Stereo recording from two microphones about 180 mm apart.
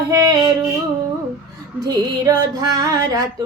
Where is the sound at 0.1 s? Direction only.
20° right (ahead or behind).